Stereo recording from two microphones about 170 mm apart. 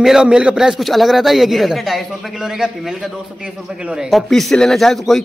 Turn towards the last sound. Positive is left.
turn(degrees=0)  # may be behind; listen again after turning